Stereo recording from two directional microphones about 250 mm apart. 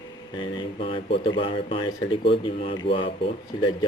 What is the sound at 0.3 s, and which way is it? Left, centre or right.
Speech, centre.